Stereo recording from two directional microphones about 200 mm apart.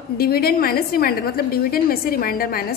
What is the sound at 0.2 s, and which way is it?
A woman's voice, 50° left (ahead or behind).